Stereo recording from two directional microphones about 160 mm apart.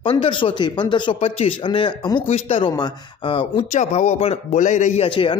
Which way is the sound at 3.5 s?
45° left (ahead or behind).